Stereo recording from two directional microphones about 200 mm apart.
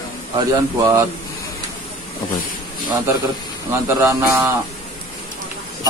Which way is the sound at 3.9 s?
15° right (ahead or behind).